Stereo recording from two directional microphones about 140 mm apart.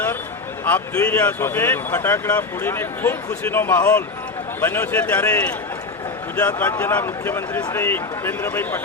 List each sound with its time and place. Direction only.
0.6 s speech: 15° left (ahead or behind)
6.6 s speech: 15° left (ahead or behind)